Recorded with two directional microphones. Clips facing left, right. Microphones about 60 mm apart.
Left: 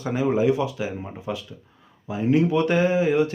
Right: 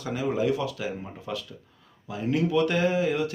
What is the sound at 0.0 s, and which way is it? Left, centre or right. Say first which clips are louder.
Speech: left 5 dB; left.